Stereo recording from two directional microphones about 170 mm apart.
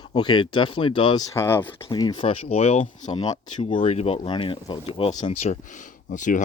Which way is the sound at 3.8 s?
35° left (ahead or behind).